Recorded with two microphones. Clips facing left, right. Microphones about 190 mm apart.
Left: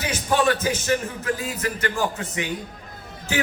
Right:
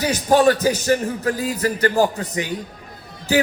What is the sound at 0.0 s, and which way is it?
Speech, 40° right (ahead or behind).